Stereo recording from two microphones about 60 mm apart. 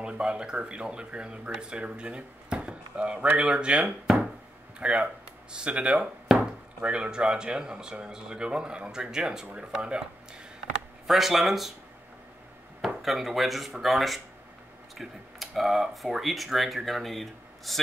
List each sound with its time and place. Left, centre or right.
0.0 s speech: centre
11.1 s speech: centre
12.8 s speech: centre